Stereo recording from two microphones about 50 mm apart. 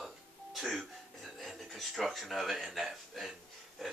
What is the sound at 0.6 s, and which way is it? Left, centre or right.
Music, centre.